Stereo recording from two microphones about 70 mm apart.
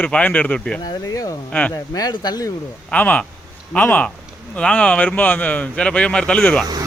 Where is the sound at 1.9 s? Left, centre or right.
Left.